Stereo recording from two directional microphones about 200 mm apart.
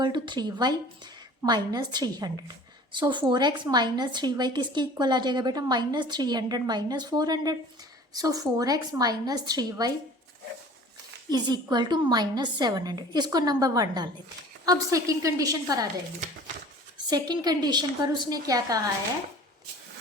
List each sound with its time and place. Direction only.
0.0 s a woman's voice: 20° right (ahead or behind)
11.3 s a woman's voice: 20° right (ahead or behind)
17.1 s a woman's voice: 20° right (ahead or behind)